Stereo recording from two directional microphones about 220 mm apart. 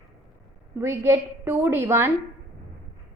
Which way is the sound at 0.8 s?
10° right (ahead or behind).